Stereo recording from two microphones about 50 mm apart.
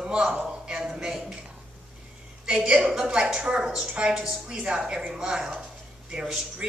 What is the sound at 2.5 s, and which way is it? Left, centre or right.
A woman's voice, right.